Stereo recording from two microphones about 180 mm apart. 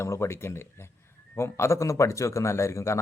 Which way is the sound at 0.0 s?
15° left (ahead or behind).